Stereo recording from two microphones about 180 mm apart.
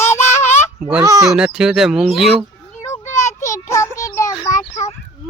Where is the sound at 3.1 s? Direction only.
40° left (ahead or behind).